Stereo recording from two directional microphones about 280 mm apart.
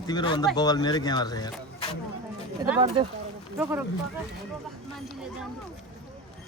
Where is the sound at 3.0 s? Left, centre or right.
Centre.